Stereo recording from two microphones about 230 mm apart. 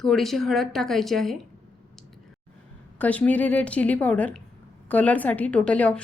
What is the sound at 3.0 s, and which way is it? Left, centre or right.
A woman's voice, centre.